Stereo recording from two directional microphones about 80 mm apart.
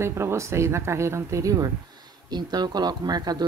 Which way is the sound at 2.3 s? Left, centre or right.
Right.